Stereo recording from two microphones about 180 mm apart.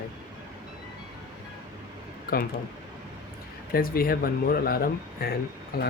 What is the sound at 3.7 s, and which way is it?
Speech, 55° left (ahead or behind).